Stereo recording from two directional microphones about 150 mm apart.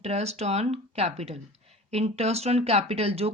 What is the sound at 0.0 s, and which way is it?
Speech, 45° right (ahead or behind).